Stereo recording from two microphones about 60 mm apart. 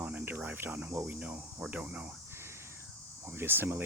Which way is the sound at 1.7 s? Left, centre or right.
Right.